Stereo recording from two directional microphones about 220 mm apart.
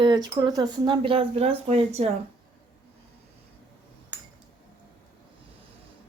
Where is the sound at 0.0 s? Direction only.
20° right (ahead or behind).